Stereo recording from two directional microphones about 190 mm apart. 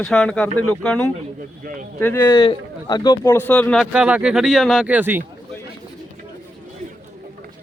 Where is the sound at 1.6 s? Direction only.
45° right (ahead or behind).